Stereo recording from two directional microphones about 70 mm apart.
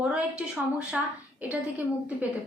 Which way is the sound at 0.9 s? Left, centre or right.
Centre.